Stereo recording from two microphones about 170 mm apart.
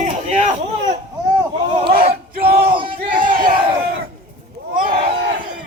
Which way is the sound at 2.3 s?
65° right (ahead or behind).